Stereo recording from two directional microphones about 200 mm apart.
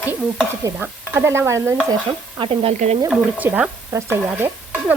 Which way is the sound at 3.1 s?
5° right (ahead or behind).